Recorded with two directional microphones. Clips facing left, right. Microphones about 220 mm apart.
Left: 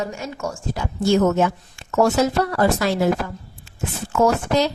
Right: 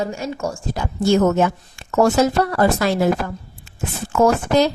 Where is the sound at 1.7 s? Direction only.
50° right (ahead or behind).